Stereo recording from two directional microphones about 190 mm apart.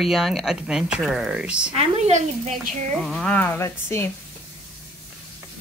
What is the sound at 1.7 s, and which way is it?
Speech, 35° right (ahead or behind).